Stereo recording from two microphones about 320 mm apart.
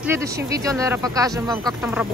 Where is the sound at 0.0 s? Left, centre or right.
Centre.